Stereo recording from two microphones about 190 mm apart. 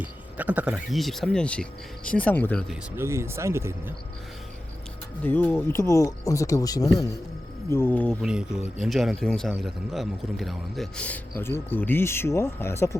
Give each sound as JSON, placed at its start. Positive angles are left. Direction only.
{"t": 0.0, "sound": "a man's voice", "side_deg": -10}
{"t": 2.9, "sound": "speech", "side_deg": -15}
{"t": 5.2, "sound": "a man's voice", "side_deg": 10}
{"t": 8.2, "sound": "a man's voice", "side_deg": -5}